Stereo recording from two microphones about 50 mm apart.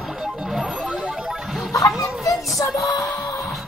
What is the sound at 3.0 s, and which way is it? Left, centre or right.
Music, left.